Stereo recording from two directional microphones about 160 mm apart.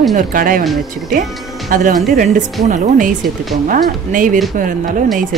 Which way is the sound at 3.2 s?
Centre (ahead or behind).